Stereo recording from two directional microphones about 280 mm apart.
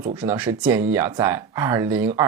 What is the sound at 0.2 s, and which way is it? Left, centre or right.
Speech, centre.